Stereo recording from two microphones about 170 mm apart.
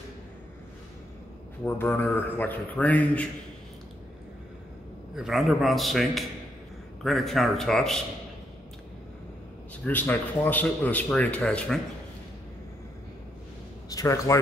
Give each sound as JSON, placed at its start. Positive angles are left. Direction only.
{"t": 1.6, "sound": "speech", "side_deg": 10}
{"t": 5.1, "sound": "a man's voice", "side_deg": 0}
{"t": 9.8, "sound": "speech", "side_deg": 10}
{"t": 13.8, "sound": "a man's voice", "side_deg": 20}